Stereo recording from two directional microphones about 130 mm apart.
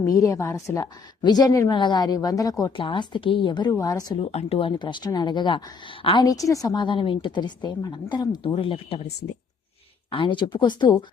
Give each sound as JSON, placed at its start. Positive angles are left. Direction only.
{"t": 0.0, "sound": "a woman's voice", "side_deg": 25}
{"t": 2.7, "sound": "a woman's voice", "side_deg": 40}
{"t": 4.2, "sound": "a woman's voice", "side_deg": 50}
{"t": 6.2, "sound": "a woman's voice", "side_deg": 25}